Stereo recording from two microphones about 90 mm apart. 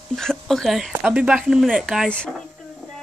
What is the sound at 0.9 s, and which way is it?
Speech, 20° right (ahead or behind).